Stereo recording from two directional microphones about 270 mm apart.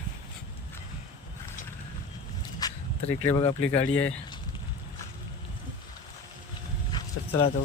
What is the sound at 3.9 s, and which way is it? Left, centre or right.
Speech, left.